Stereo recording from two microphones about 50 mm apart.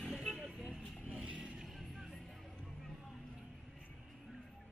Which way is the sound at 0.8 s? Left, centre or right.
Centre.